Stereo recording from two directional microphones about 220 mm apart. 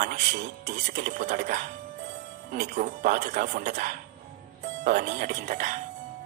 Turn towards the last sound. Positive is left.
turn(degrees=-35)  # may be behind; listen again after turning